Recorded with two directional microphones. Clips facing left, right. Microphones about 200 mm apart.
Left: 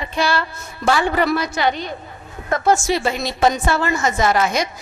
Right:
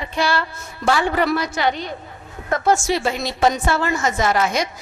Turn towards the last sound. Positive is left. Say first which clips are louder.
# left 1 dB
turn(degrees=20)  # may be behind; listen again after turning